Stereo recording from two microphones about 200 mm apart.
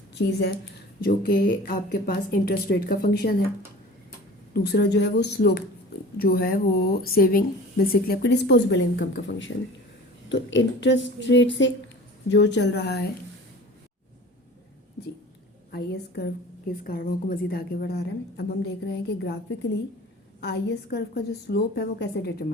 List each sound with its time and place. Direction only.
0.2 s a woman's voice: 55° left (ahead or behind)
4.5 s a woman's voice: 55° left (ahead or behind)
15.7 s speech: 55° left (ahead or behind)
20.4 s a woman's voice: 55° left (ahead or behind)